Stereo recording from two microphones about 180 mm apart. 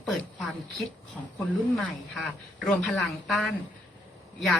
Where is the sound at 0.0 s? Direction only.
Centre (ahead or behind).